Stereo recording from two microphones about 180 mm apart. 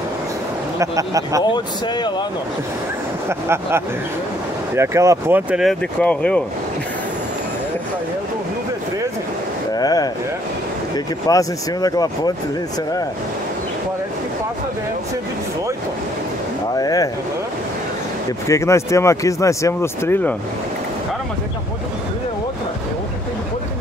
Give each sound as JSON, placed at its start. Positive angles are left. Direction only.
{"t": 0.7, "sound": "speech", "side_deg": -20}
{"t": 1.4, "sound": "speech", "side_deg": 25}
{"t": 3.3, "sound": "speech", "side_deg": -15}
{"t": 9.8, "sound": "speech", "side_deg": 20}
{"t": 11.2, "sound": "speech", "side_deg": 20}
{"t": 16.7, "sound": "speech", "side_deg": 20}
{"t": 18.5, "sound": "speech", "side_deg": 15}